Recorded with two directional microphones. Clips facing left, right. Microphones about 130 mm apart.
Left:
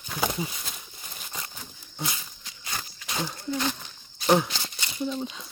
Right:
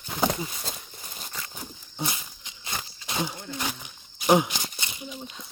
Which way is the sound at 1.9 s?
20° right (ahead or behind).